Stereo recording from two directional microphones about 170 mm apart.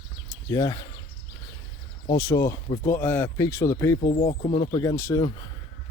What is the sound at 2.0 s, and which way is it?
Speech, 25° left (ahead or behind).